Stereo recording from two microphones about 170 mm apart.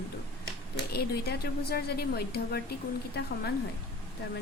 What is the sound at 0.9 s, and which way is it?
A woman's voice, 70° left (ahead or behind).